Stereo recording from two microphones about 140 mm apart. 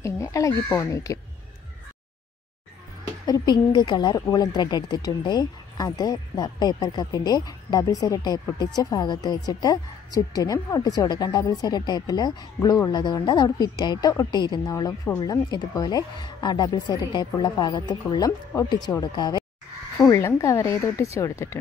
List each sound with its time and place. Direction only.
0.0 s a child's voice: 20° left (ahead or behind)
3.3 s a woman's voice: 30° left (ahead or behind)